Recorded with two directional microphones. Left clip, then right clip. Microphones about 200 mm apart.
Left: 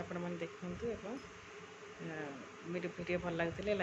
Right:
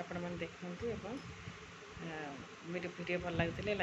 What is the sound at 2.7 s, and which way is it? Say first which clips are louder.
Speech: even; 5° left (ahead or behind).